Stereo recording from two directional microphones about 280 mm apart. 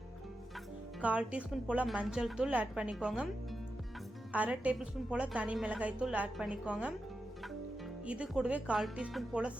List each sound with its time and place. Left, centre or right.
1.0 s a woman's voice: centre
4.3 s a woman's voice: centre
8.0 s a woman's voice: centre